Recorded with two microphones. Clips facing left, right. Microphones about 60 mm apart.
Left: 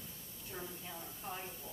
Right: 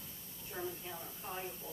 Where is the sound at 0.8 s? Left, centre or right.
Centre.